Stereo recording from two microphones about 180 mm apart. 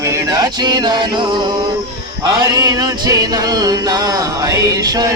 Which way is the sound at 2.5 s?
20° right (ahead or behind).